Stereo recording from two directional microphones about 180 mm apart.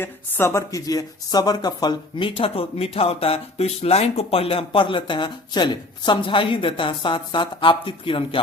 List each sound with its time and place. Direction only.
0.0 s speech: 15° left (ahead or behind); by 8.4 s 30° left (ahead or behind)